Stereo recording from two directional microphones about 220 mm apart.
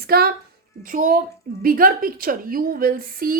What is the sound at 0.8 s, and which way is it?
A woman's voice, 40° right (ahead or behind).